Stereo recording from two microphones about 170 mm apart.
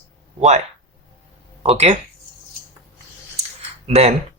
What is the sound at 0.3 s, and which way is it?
Speech, 40° right (ahead or behind).